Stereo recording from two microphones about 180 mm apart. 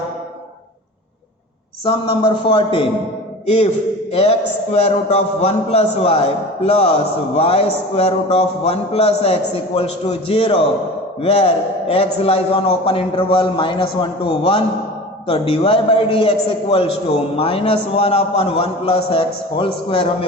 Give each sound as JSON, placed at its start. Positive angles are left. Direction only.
{"t": 1.8, "sound": "a woman's voice", "side_deg": 25}
{"t": 4.1, "sound": "a man's voice", "side_deg": 35}